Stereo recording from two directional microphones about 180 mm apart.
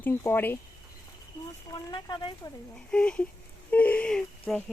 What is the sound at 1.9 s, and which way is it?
Speech, 25° left (ahead or behind).